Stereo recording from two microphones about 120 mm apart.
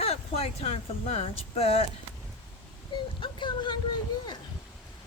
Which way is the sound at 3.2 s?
40° left (ahead or behind).